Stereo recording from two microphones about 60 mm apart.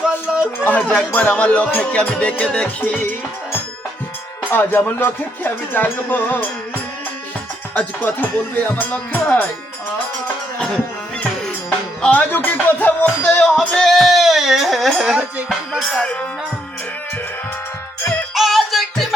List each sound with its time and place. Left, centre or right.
0.0 s a sound: centre
0.6 s music: left
4.5 s music: left
7.7 s music: left
12.0 s music: left
13.2 s music: centre
18.3 s music: centre